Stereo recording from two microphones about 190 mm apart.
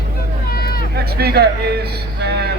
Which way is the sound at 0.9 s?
55° right (ahead or behind).